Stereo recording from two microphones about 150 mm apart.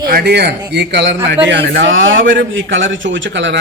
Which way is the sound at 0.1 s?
90° right.